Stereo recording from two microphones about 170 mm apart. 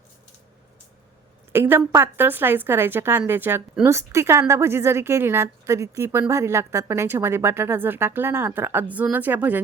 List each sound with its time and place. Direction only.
1.5 s a woman's voice: 10° right (ahead or behind)